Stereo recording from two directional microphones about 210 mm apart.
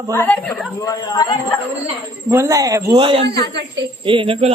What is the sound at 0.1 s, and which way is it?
Speech, 10° left (ahead or behind).